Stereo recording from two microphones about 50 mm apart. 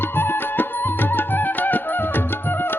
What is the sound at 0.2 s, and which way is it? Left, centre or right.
Music, left.